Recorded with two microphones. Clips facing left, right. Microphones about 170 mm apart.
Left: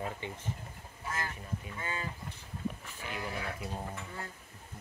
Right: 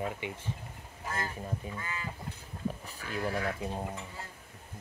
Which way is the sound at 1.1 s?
35° right (ahead or behind).